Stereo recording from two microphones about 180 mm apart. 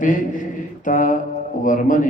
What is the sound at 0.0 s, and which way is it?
Mantra, 45° left (ahead or behind).